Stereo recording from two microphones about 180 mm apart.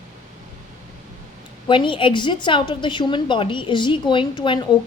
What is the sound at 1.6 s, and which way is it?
A woman's voice, 25° left (ahead or behind).